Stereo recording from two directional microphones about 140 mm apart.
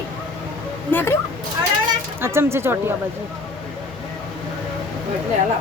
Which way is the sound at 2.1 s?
15° right (ahead or behind).